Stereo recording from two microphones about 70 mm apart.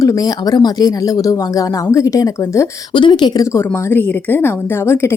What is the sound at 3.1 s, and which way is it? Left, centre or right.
Speech, left.